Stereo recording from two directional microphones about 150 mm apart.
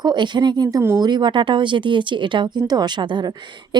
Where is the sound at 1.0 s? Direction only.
30° right (ahead or behind).